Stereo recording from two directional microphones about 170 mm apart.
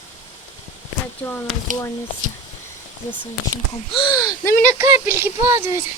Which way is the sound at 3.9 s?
25° left (ahead or behind).